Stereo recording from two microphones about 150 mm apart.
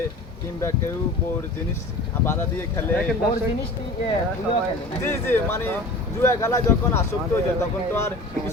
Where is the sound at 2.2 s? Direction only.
15° left (ahead or behind).